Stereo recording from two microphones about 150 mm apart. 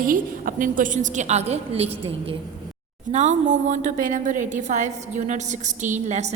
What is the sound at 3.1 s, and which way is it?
A woman's voice, 50° right (ahead or behind).